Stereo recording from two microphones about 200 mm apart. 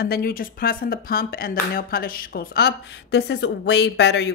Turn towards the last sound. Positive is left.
turn(degrees=60)  # may be behind; listen again after turning